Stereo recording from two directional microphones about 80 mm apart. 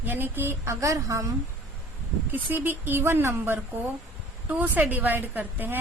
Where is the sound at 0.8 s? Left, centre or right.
Right.